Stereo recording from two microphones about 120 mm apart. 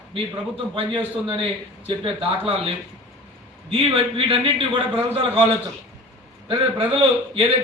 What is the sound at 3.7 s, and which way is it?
Speech, 50° right (ahead or behind).